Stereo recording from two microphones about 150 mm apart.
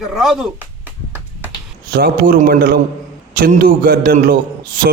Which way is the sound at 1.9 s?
85° right.